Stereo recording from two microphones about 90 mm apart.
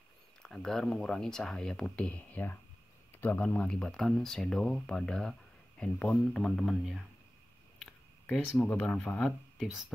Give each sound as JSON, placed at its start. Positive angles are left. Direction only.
{"t": 0.4, "sound": "speech", "side_deg": 5}
{"t": 6.3, "sound": "speech", "side_deg": 0}
{"t": 8.7, "sound": "speech", "side_deg": 10}
{"t": 9.6, "sound": "speech", "side_deg": -5}